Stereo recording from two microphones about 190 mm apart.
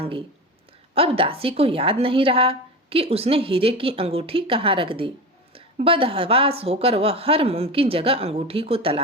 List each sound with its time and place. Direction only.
0.0 s a woman's voice: 30° right (ahead or behind)